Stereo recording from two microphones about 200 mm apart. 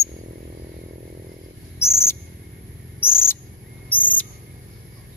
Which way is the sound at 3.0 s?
10° left (ahead or behind).